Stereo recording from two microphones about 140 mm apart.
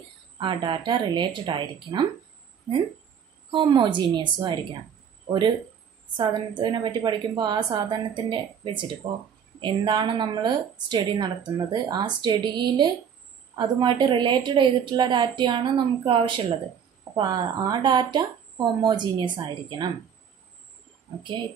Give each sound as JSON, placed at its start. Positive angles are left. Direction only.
{"t": 0.4, "sound": "a woman's voice", "side_deg": -35}
{"t": 3.5, "sound": "a woman's voice", "side_deg": -30}
{"t": 6.1, "sound": "a woman's voice", "side_deg": -35}
{"t": 21.2, "sound": "a woman's voice", "side_deg": -35}